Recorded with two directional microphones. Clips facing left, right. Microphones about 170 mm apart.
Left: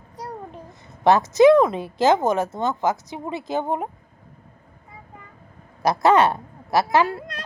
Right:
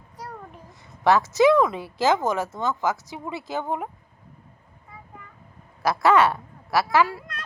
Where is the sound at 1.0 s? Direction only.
20° left (ahead or behind).